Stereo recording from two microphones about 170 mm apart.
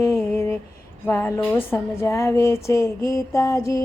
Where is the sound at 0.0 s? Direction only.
15° left (ahead or behind).